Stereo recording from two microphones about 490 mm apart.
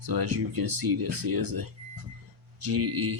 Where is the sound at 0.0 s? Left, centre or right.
Right.